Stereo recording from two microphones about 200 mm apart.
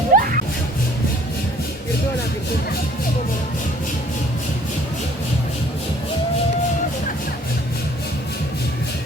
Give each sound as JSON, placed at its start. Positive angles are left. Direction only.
{"t": 0.1, "sound": "music", "side_deg": -45}